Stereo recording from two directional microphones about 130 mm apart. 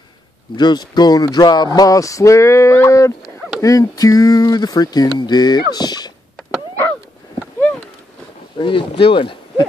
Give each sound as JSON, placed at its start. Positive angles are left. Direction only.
{"t": 0.6, "sound": "speech", "side_deg": 35}
{"t": 8.5, "sound": "speech", "side_deg": 40}